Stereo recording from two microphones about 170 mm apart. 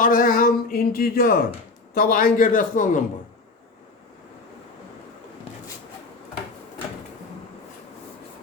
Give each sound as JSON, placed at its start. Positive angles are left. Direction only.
{"t": 0.0, "sound": "a man's voice", "side_deg": 55}